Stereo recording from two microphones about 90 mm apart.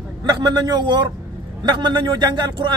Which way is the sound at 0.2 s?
50° right (ahead or behind).